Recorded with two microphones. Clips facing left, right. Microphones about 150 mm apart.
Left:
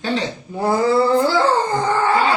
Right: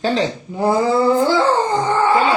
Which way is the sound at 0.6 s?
20° right (ahead or behind).